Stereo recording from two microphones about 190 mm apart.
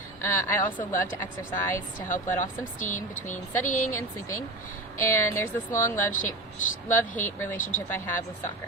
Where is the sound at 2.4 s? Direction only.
40° left (ahead or behind).